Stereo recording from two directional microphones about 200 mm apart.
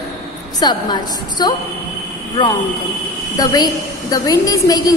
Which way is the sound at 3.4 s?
20° left (ahead or behind).